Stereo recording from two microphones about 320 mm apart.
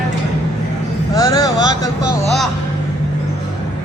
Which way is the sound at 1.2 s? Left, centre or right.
Centre.